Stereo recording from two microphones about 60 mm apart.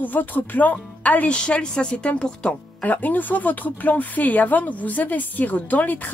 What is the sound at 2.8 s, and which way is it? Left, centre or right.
Speech, left.